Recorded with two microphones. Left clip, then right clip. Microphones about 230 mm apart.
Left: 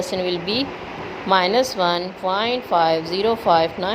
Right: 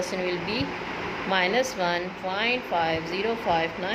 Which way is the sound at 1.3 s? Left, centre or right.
Left.